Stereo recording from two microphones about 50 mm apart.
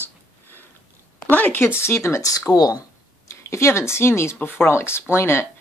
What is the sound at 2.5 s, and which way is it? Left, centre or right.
Speech, left.